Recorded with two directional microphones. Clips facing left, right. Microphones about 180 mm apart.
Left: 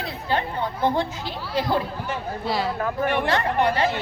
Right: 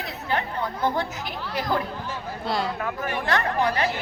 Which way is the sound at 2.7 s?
35° left (ahead or behind).